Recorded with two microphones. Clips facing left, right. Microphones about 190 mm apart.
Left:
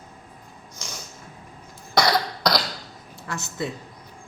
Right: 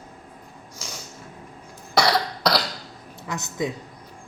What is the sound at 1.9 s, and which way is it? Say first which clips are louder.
Cough: even; 5° right (ahead or behind).